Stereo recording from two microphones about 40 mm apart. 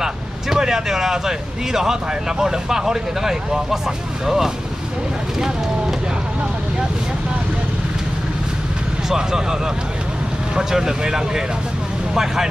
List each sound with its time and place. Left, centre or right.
0.0 s speech: centre
9.1 s speech: centre